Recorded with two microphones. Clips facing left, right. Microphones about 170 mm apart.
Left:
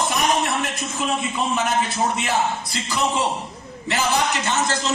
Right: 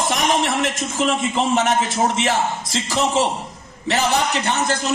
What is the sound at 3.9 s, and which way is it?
Speech, 65° right (ahead or behind).